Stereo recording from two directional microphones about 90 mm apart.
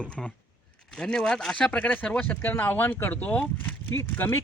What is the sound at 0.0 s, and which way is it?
A man's voice, 15° left (ahead or behind).